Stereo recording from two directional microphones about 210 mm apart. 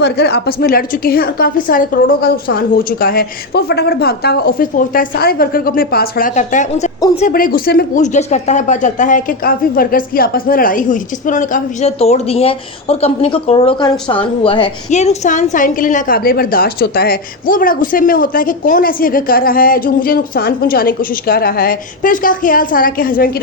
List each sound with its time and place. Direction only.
0.0 s a woman's voice: 50° left (ahead or behind)